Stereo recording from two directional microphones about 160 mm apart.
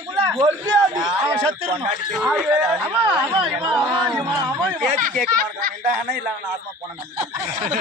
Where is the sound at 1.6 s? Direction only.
40° right (ahead or behind).